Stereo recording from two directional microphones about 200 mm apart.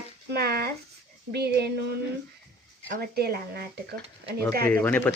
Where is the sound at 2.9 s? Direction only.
50° right (ahead or behind).